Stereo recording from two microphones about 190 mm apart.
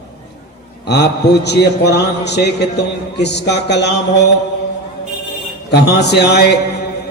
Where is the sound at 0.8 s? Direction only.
60° left (ahead or behind).